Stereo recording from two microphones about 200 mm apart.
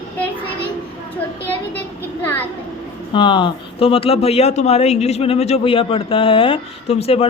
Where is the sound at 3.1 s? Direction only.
25° left (ahead or behind).